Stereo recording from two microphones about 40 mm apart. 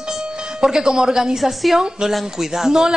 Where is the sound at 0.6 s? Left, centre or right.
Centre.